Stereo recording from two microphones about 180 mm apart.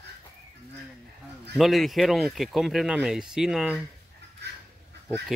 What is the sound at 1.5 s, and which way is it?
Speech, centre (ahead or behind).